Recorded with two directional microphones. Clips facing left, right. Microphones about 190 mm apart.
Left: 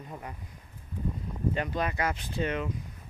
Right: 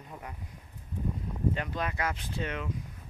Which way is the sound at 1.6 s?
5° left (ahead or behind).